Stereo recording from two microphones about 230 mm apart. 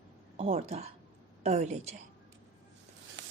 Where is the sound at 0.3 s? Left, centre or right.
Right.